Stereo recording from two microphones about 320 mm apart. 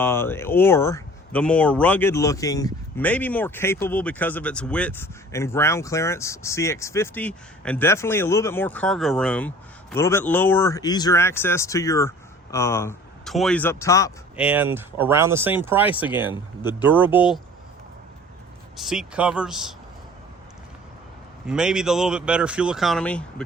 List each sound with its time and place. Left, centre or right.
0.0 s speech: centre
14.3 s speech: centre
18.8 s speech: centre
21.4 s speech: centre